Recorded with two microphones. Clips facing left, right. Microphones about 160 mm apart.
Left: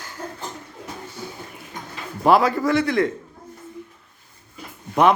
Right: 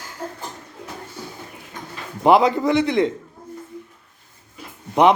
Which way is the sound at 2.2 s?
20° right (ahead or behind).